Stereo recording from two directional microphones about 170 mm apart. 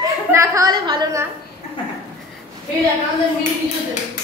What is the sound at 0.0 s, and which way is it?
A woman's voice, 20° right (ahead or behind).